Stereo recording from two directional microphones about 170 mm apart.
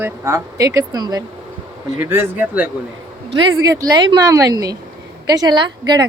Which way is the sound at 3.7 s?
20° right (ahead or behind).